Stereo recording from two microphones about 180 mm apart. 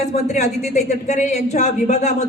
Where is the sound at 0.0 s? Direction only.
40° left (ahead or behind).